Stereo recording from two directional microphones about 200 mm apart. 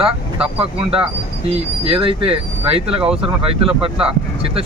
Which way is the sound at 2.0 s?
25° right (ahead or behind).